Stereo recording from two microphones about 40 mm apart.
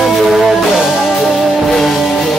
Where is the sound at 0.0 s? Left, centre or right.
Centre.